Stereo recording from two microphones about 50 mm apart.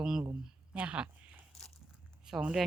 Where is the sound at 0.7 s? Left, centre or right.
Right.